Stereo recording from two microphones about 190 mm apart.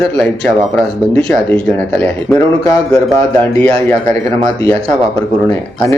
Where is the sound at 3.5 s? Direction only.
10° left (ahead or behind).